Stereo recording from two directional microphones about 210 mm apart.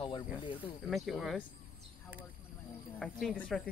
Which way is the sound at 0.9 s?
Centre (ahead or behind).